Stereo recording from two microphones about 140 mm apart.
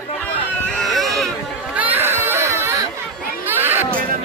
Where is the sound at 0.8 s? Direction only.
Centre (ahead or behind).